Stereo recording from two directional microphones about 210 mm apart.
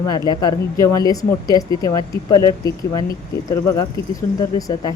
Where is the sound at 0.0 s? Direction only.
20° left (ahead or behind).